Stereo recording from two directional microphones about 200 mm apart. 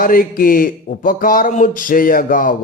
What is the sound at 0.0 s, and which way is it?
Speech, 45° left (ahead or behind).